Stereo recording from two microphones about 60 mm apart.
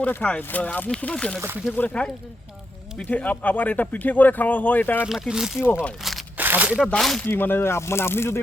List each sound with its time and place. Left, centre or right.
0.0 s speech: left
5.0 s speech: centre
6.0 s crumpling: centre
6.3 s crumpling: right
6.7 s speech: centre
7.3 s speech: left